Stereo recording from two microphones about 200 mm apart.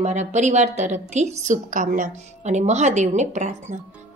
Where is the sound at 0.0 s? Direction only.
35° right (ahead or behind).